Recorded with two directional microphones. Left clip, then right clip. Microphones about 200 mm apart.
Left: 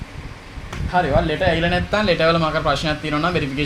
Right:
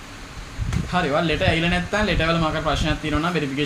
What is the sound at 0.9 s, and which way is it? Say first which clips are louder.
A man's voice: left 3 dB; 10° left (ahead or behind).